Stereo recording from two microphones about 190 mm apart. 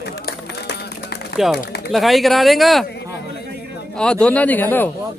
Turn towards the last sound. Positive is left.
turn(degrees=10)  # may be behind; listen again after turning